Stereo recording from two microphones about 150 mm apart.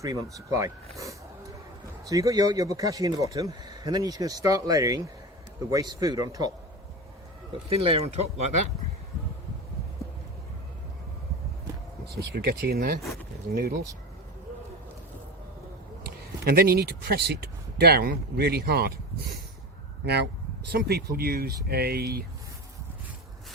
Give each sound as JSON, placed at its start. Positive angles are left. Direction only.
{"t": 0.0, "sound": "speech", "side_deg": -20}
{"t": 7.7, "sound": "speech", "side_deg": -40}
{"t": 12.0, "sound": "speech", "side_deg": -90}
{"t": 16.4, "sound": "speech", "side_deg": -90}
{"t": 20.7, "sound": "speech", "side_deg": -90}